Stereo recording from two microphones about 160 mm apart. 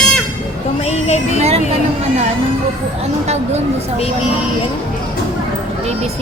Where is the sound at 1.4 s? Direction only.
40° right (ahead or behind).